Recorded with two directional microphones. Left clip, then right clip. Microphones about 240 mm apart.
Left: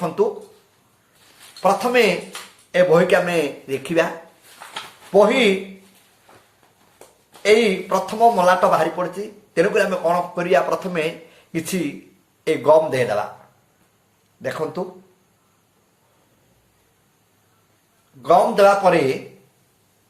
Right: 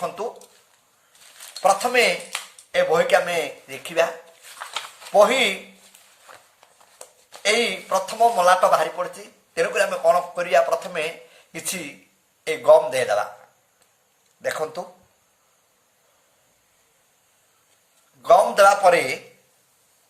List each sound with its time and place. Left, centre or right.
1.6 s a man's voice: right
5.1 s speech: centre
7.4 s a man's voice: centre
14.4 s a man's voice: right
18.2 s a man's voice: right